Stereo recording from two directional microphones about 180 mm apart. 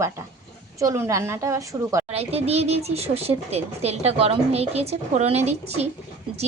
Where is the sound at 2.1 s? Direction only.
35° right (ahead or behind).